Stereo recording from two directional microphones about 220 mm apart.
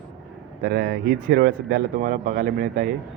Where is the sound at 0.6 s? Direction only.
45° right (ahead or behind).